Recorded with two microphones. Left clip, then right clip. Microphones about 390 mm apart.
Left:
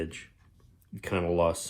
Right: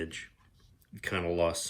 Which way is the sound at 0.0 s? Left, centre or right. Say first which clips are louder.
Left 2 dB; centre.